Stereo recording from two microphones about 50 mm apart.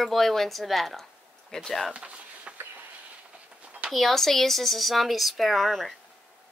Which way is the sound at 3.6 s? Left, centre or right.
Right.